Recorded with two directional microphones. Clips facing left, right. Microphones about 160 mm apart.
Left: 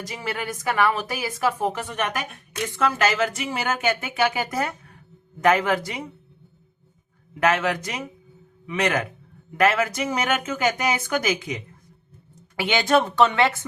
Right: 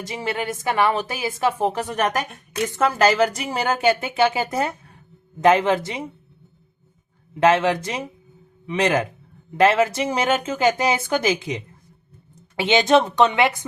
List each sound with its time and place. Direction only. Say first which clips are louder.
0.0 s speech: right 4 dB; 25° right (ahead or behind)
1.8 s speech: right 5 dB; 40° right (ahead or behind)
7.3 s speech: right 5 dB; 30° right (ahead or behind)